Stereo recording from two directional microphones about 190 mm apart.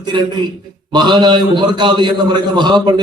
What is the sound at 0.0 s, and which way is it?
A man's voice, 25° right (ahead or behind).